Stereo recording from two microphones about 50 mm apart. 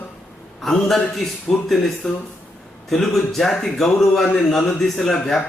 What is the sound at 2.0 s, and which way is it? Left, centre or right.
Speech, left.